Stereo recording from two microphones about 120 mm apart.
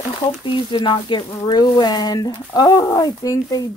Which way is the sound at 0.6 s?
45° left (ahead or behind).